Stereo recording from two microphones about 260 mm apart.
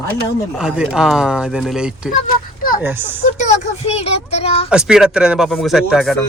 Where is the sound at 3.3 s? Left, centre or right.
Left.